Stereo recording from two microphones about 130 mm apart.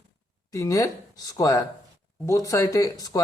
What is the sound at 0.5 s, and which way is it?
Speech, 25° left (ahead or behind).